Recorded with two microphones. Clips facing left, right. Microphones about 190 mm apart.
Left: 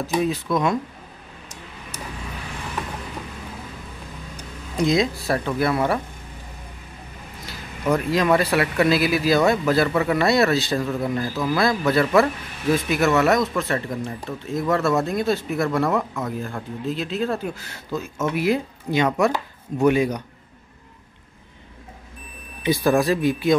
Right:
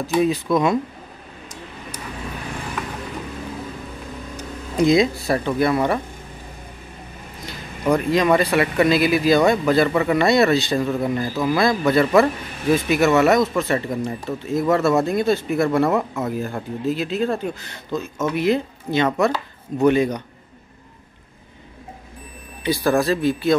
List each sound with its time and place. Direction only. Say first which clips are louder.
0.2 s speech: right 5 dB; centre (ahead or behind)
4.4 s speech: right 4 dB; centre (ahead or behind)
7.9 s speech: right 2 dB; centre (ahead or behind)
22.6 s speech: even; 15° left (ahead or behind)